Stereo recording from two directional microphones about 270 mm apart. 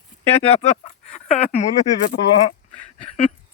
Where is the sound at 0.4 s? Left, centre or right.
Left.